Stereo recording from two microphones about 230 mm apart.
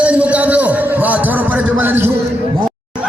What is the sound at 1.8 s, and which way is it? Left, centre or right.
Music, centre.